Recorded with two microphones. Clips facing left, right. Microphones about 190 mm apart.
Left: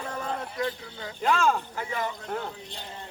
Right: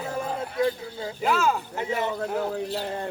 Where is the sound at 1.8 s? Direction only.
20° right (ahead or behind).